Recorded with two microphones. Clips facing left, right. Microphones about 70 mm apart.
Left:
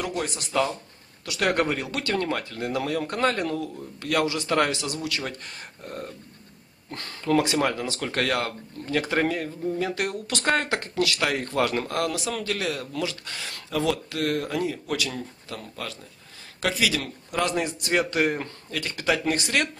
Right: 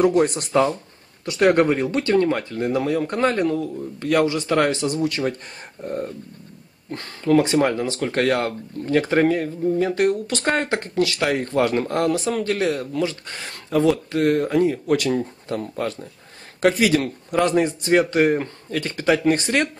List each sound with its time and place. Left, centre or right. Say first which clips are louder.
0.0 s speech: right 12 dB; right
1.4 s speech: right 8 dB; right
5.9 s speech: right 9 dB; centre
7.3 s speech: right 5 dB; centre
8.0 s speech: right 6 dB; centre; by 19.7 s right